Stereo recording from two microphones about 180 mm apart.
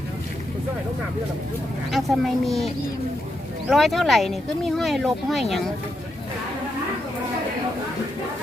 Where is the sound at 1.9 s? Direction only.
Centre (ahead or behind).